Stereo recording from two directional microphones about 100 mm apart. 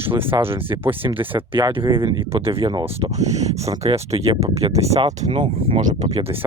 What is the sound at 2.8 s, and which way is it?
Speech, 85° right.